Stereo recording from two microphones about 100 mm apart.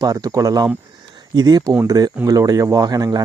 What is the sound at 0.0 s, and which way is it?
Speech, 35° right (ahead or behind).